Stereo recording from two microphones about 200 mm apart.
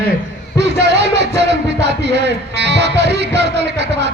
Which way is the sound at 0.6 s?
60° right (ahead or behind).